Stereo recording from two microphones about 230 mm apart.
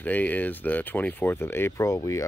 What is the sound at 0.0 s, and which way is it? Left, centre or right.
Speech, centre.